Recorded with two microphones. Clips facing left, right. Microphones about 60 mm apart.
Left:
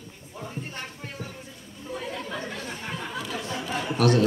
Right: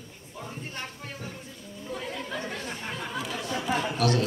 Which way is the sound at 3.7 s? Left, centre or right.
Centre.